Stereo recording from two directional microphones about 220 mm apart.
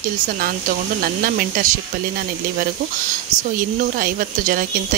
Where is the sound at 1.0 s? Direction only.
40° right (ahead or behind).